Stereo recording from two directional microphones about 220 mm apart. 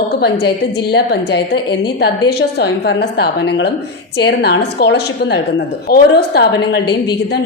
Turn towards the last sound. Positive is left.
turn(degrees=50)  # may be behind; listen again after turning